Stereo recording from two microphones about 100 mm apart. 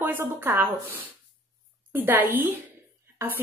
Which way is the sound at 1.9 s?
20° right (ahead or behind).